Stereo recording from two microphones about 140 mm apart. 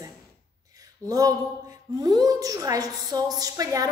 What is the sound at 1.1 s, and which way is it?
A woman's voice, 25° right (ahead or behind).